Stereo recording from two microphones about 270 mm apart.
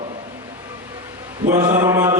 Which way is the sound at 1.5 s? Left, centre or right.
Centre.